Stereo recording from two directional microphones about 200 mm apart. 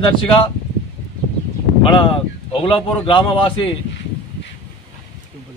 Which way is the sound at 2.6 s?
25° left (ahead or behind).